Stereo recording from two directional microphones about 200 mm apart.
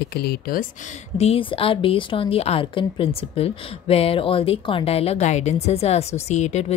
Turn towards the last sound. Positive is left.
turn(degrees=35)  # may be behind; listen again after turning